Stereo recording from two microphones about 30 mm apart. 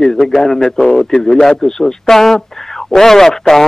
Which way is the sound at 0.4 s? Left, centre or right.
Centre.